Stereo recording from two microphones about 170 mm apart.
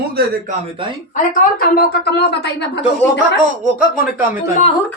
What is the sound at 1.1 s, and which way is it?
A woman's voice, 50° left (ahead or behind).